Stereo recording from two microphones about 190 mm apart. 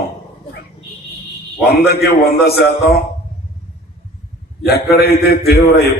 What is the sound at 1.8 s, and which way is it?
Speech, 55° left (ahead or behind).